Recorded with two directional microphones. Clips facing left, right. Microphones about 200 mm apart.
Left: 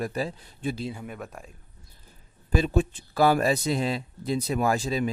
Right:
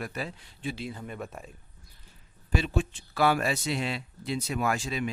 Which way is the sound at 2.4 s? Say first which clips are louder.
Left 5 dB; 40° left (ahead or behind).